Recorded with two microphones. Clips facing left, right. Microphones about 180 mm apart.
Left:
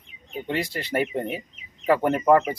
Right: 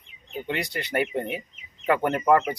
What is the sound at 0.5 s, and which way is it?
Speech, 30° left (ahead or behind).